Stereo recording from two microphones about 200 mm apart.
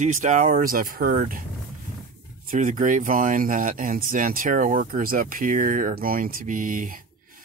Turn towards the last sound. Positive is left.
turn(degrees=-40)  # may be behind; listen again after turning